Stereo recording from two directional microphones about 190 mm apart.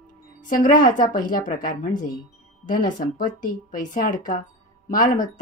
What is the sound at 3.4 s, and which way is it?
A woman's voice, 45° left (ahead or behind).